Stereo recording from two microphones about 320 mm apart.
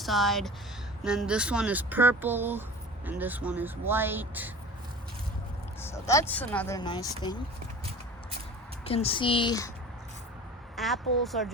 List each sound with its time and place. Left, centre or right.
0.0 s speech: centre
5.8 s speech: centre
8.8 s speech: centre
10.8 s speech: centre